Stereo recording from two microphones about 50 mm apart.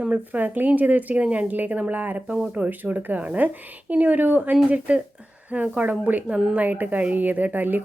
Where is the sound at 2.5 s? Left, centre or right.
Right.